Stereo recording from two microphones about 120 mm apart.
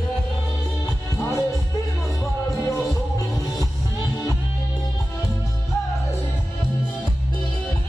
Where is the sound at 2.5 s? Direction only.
25° left (ahead or behind).